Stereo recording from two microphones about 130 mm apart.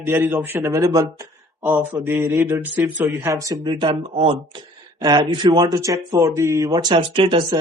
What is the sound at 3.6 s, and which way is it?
Speech, 40° right (ahead or behind).